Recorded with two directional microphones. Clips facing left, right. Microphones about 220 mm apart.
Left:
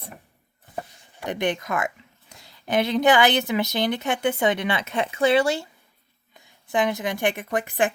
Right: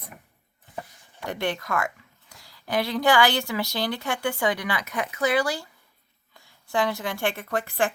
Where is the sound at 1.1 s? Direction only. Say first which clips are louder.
Left 3 dB; 20° left (ahead or behind).